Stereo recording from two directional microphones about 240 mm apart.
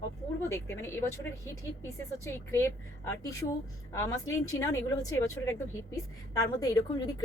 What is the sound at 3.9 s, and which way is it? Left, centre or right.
A woman's voice, centre.